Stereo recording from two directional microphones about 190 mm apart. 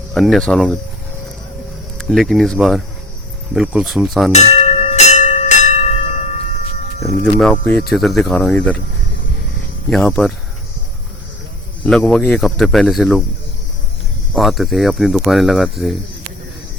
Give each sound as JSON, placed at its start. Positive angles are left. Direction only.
{"t": 0.1, "sound": "speech", "side_deg": 0}
{"t": 2.0, "sound": "speech", "side_deg": 0}
{"t": 4.3, "sound": "bell", "side_deg": 35}
{"t": 7.3, "sound": "speech", "side_deg": 5}
{"t": 9.9, "sound": "speech", "side_deg": 5}
{"t": 11.8, "sound": "speech", "side_deg": 5}
{"t": 14.3, "sound": "speech", "side_deg": 0}